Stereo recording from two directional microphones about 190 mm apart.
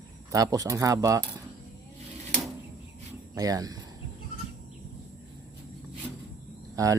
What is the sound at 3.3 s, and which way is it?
Speech, 20° right (ahead or behind).